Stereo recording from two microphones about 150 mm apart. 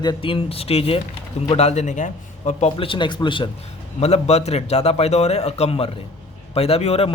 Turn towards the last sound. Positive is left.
turn(degrees=40)  # may be behind; listen again after turning